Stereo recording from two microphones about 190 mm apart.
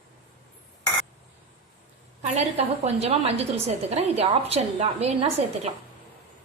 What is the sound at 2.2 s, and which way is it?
A woman's voice, 35° right (ahead or behind).